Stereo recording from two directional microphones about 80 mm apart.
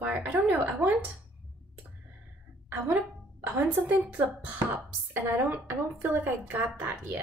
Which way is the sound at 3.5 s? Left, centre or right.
Right.